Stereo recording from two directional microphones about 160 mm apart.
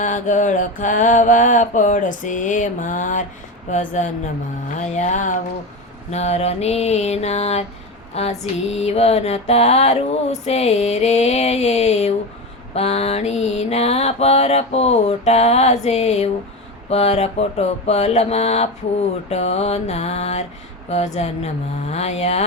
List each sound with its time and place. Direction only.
0.0 s mantra: 50° left (ahead or behind)